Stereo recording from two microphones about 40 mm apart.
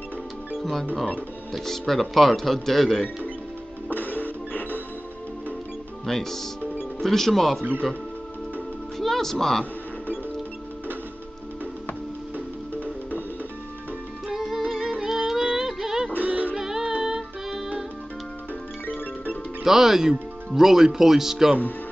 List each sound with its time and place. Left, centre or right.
0.6 s speech: centre
3.9 s music: left
6.0 s speech: centre
8.9 s music: centre
14.4 s music: centre
15.3 s a sound: centre
16.5 s music: centre
19.6 s speech: centre